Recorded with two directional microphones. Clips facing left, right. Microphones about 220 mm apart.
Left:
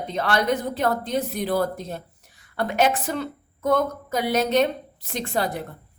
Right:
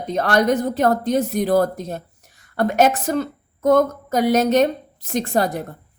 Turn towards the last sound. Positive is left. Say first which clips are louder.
# right 5 dB
turn(degrees=-45)  # may be behind; listen again after turning